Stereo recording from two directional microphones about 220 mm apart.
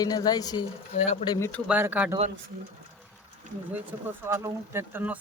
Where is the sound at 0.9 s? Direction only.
30° left (ahead or behind).